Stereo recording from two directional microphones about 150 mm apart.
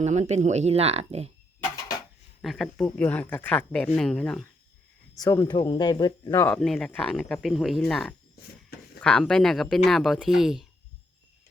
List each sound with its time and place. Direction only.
0.0 s speech: 50° right (ahead or behind)
2.4 s speech: centre (ahead or behind)
5.1 s speech: 25° left (ahead or behind)
6.6 s speech: 5° left (ahead or behind)